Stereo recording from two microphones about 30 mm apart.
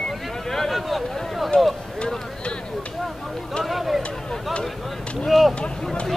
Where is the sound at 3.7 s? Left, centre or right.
Centre.